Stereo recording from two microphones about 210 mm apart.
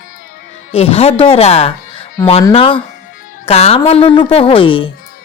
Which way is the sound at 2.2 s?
15° left (ahead or behind).